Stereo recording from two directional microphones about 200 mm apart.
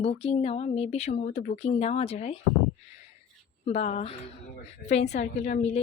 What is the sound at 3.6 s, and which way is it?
A woman's voice, 35° left (ahead or behind).